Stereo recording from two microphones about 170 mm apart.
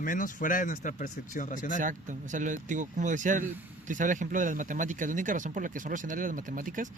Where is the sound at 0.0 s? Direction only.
50° left (ahead or behind).